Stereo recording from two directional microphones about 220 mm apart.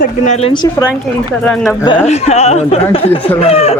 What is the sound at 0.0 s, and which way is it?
Speech, 30° left (ahead or behind).